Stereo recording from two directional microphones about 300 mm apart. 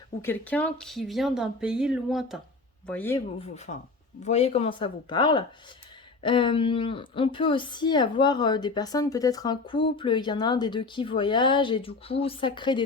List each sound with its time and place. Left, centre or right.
0.2 s speech: centre
3.4 s a woman's voice: left